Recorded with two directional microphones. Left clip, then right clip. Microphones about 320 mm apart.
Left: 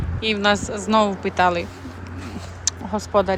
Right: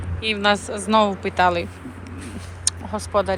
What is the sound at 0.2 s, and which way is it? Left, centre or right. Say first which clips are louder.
Speech: even; centre.